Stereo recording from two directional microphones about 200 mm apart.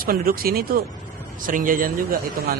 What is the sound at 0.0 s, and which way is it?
Speech, 45° right (ahead or behind).